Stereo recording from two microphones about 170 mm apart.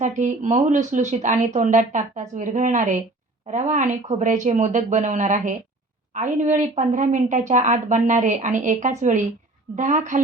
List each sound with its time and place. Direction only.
0.0 s speech: 45° right (ahead or behind)